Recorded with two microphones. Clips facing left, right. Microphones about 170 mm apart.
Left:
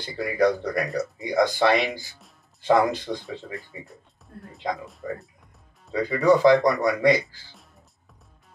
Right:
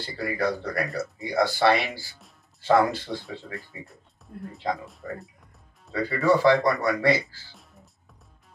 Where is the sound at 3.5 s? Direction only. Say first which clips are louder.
Left 1 dB; centre (ahead or behind).